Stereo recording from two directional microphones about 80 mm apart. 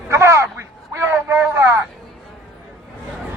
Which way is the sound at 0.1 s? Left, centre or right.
Right.